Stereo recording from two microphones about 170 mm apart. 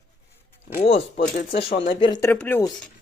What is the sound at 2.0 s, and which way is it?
Speech, 25° left (ahead or behind).